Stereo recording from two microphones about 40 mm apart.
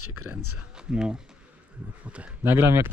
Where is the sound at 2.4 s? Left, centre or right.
Right.